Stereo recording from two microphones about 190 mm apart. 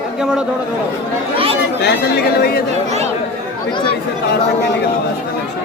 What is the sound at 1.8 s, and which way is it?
Speech, 55° left (ahead or behind).